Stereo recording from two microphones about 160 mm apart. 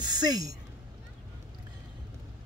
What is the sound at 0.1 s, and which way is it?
Speech, 25° right (ahead or behind).